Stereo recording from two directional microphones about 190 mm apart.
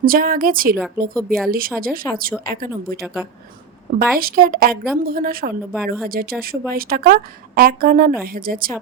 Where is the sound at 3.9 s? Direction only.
50° right (ahead or behind).